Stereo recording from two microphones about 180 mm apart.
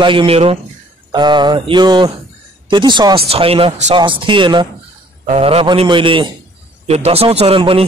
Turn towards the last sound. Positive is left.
turn(degrees=-30)  # may be behind; listen again after turning